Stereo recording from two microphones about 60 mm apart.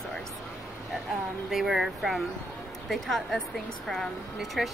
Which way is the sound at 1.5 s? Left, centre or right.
Centre.